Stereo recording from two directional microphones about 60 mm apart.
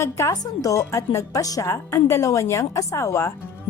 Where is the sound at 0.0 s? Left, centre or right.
Left.